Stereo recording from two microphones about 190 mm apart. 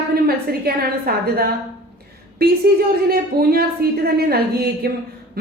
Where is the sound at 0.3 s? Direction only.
55° right (ahead or behind).